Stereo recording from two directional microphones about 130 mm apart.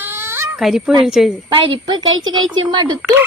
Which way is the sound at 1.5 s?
35° right (ahead or behind).